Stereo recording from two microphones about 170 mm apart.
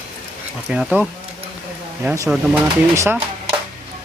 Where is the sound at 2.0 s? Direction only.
20° right (ahead or behind).